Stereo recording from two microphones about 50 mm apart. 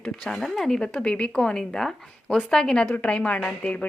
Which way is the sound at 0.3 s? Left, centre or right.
Centre.